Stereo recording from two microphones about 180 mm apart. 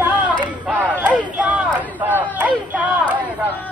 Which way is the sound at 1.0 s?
5° right (ahead or behind).